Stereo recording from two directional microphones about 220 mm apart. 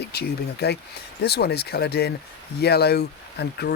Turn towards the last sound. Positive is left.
turn(degrees=50)  # may be behind; listen again after turning